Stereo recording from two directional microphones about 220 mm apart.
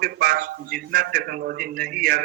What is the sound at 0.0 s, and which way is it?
Speech, 45° right (ahead or behind).